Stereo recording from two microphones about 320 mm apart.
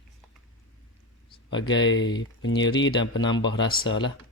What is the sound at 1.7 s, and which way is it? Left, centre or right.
Mantra, left.